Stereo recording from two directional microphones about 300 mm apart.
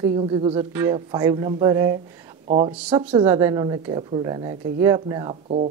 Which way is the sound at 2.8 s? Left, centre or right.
Centre.